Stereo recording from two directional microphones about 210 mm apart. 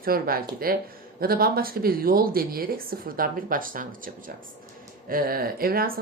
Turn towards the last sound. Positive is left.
turn(degrees=-45)  # may be behind; listen again after turning